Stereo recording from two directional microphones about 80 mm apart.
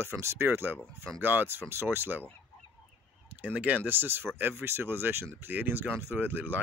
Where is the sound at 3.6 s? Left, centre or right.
Centre.